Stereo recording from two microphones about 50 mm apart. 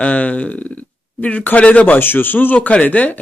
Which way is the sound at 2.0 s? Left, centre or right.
Left.